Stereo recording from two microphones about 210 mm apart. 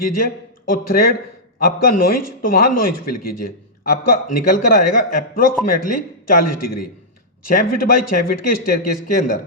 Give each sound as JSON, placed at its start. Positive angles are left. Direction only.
{"t": 0.7, "sound": "speech", "side_deg": 45}